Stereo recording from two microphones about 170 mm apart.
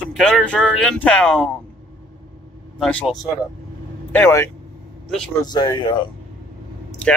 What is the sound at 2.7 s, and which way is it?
Speech, 5° left (ahead or behind).